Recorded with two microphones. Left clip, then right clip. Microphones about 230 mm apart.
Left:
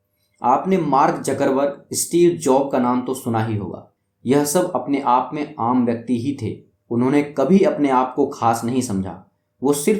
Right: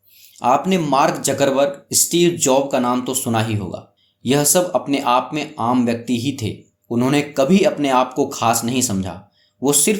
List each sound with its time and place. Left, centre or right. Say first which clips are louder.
0.3 s speech: right 1 dB; right